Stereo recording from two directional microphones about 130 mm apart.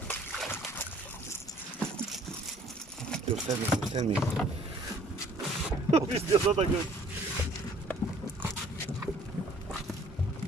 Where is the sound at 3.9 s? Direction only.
50° right (ahead or behind).